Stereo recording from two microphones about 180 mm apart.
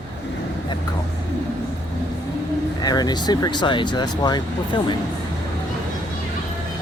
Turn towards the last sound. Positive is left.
turn(degrees=25)  # may be behind; listen again after turning